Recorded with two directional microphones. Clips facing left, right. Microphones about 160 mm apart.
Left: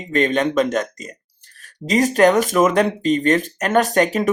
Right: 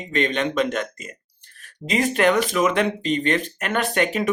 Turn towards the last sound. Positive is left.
turn(degrees=40)  # may be behind; listen again after turning